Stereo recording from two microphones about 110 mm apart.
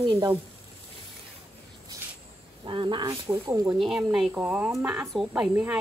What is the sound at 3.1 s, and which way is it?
Speech, 25° right (ahead or behind).